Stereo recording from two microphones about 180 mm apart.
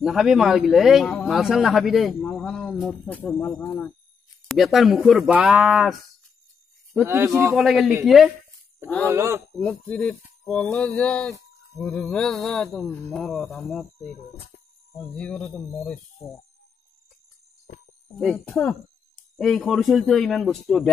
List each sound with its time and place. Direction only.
0.0 s mantra: centre (ahead or behind)
1.2 s speech: centre (ahead or behind)
4.5 s mantra: centre (ahead or behind)
9.0 s speech: 15° right (ahead or behind)
9.6 s speech: 5° left (ahead or behind)
11.7 s mantra: 5° left (ahead or behind)
15.0 s speech: 5° left (ahead or behind)
18.1 s speech: 5° left (ahead or behind)
19.3 s mantra: centre (ahead or behind)